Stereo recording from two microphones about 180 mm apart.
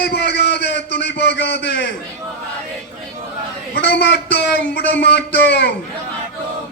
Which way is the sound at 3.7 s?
65° left (ahead or behind).